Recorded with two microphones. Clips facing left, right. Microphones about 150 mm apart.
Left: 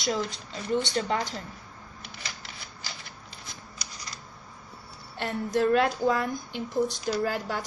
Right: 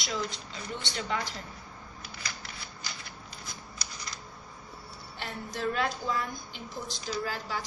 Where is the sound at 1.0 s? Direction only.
40° left (ahead or behind).